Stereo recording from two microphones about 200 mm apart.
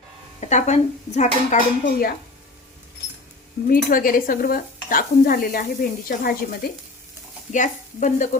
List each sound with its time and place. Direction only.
0.3 s speech: 35° left (ahead or behind)
3.7 s speech: 45° left (ahead or behind)